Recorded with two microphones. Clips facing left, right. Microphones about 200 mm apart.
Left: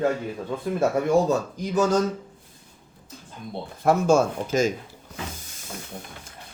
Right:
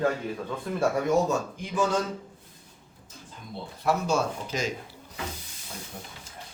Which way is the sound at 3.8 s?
50° left (ahead or behind).